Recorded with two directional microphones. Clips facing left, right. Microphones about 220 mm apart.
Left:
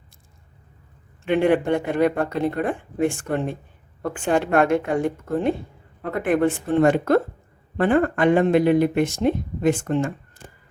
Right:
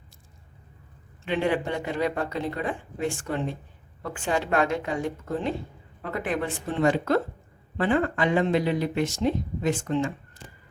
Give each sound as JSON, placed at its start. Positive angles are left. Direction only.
{"t": 1.3, "sound": "speech", "side_deg": 55}